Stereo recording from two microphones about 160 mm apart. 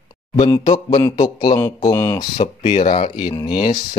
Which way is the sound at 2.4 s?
40° left (ahead or behind).